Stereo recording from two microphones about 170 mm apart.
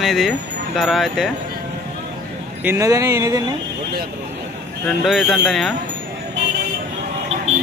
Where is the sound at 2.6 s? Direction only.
20° right (ahead or behind).